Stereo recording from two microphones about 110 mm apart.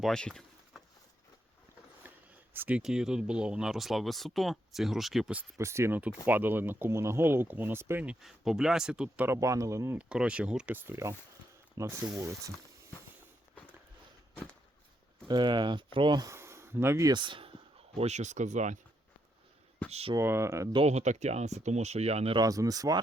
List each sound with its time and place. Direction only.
0.0 s a sound: 5° left (ahead or behind)
2.0 s speech: 15° right (ahead or behind); by 5.3 s centre (ahead or behind)
5.5 s speech: 25° right (ahead or behind)
8.0 s speech: 5° right (ahead or behind)
9.2 s speech: 25° right (ahead or behind)
10.0 s speech: 10° right (ahead or behind); by 12.5 s 30° right (ahead or behind)
15.3 s speech: 40° right (ahead or behind)
16.2 s speech: 25° right (ahead or behind)
17.1 s speech: 45° right (ahead or behind); by 18.7 s 90° right
19.9 s speech: 65° right (ahead or behind)
20.1 s speech: 25° right (ahead or behind)
20.8 s speech: 90° right; by 22.4 s 70° right (ahead or behind)
22.4 s speech: 30° right (ahead or behind)